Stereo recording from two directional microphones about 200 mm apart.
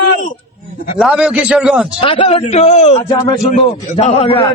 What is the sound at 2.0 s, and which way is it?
A man's voice, 25° left (ahead or behind).